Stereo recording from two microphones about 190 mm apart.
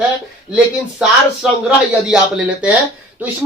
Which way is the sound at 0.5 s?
5° right (ahead or behind).